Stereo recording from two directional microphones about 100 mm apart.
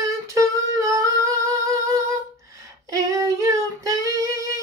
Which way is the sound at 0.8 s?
35° right (ahead or behind).